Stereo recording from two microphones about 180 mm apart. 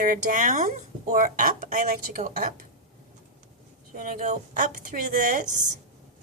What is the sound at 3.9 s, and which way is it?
Speech, 50° right (ahead or behind).